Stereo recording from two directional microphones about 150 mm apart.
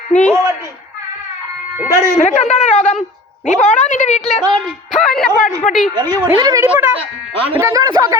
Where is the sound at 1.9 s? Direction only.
20° right (ahead or behind).